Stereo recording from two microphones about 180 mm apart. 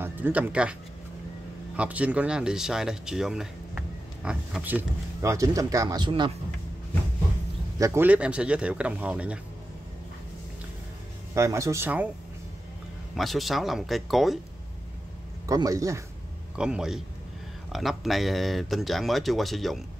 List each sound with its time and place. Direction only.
0.0 s speech: 10° right (ahead or behind)
1.8 s speech: 5° right (ahead or behind); by 6.3 s 25° right (ahead or behind)
7.8 s speech: 15° right (ahead or behind)
11.3 s speech: 15° right (ahead or behind)
13.1 s speech: centre (ahead or behind)
15.4 s a man's voice: 20° right (ahead or behind)
16.5 s speech: 5° right (ahead or behind)